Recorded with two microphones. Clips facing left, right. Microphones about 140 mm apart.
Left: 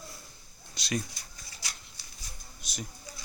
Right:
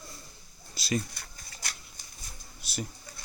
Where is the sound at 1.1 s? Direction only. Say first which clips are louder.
Right 2 dB; 55° right (ahead or behind).